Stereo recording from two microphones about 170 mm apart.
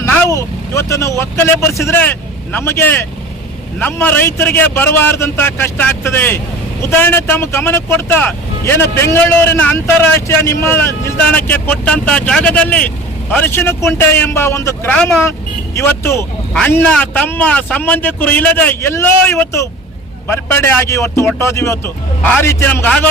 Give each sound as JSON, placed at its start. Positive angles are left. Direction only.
{"t": 0.3, "sound": "speech", "side_deg": 20}